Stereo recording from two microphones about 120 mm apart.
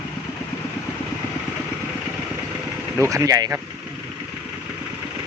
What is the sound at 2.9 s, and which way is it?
Speech, 25° right (ahead or behind).